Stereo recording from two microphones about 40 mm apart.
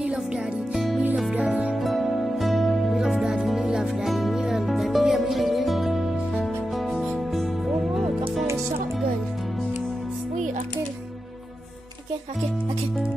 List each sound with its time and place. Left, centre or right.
0.0 s music: right
1.5 s music: right
1.8 s music: centre
3.0 s music: centre
4.1 s music: centre
4.4 s music: centre